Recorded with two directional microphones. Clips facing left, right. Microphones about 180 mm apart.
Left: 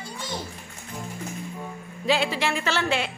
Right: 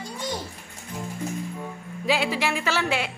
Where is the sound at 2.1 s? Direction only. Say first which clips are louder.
Even; 10° right (ahead or behind).